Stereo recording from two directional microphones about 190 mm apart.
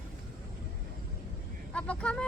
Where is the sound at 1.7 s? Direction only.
5° left (ahead or behind).